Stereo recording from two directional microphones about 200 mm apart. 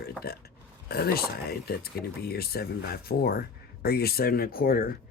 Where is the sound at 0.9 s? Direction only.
50° left (ahead or behind).